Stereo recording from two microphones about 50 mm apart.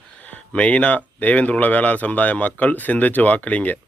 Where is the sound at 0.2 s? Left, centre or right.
Left.